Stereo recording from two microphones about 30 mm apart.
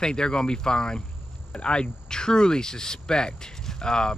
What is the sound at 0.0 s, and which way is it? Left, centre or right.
Speech, left.